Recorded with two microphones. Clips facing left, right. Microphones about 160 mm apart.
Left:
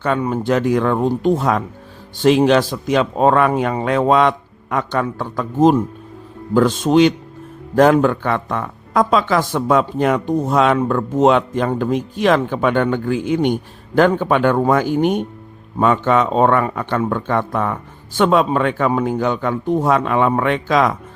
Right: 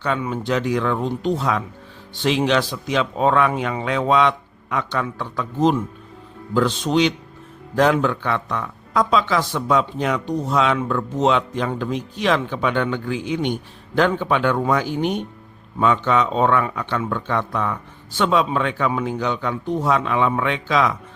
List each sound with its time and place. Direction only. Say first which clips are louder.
0.0 s speech: left 5 dB; 45° left (ahead or behind)